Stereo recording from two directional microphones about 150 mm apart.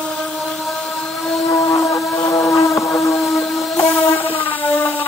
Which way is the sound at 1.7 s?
20° left (ahead or behind).